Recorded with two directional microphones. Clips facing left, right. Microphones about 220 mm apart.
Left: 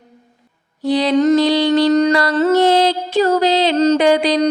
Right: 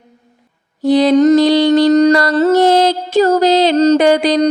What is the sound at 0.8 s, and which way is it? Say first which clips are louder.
Mantra: right 5 dB; 45° right (ahead or behind).